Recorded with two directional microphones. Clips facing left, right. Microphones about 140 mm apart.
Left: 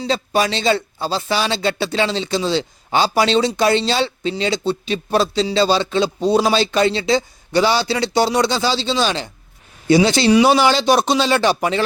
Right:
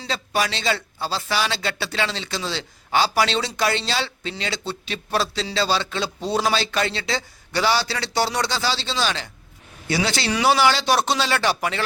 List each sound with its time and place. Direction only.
0.1 s speech: 25° left (ahead or behind)